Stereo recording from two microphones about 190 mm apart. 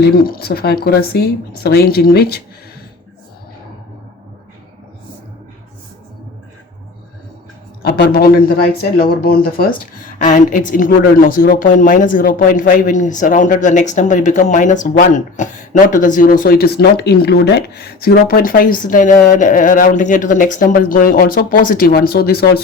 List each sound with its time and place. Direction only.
0.0 s speech: 50° left (ahead or behind)
7.8 s a woman's voice: 55° left (ahead or behind)
10.2 s a woman's voice: 40° left (ahead or behind)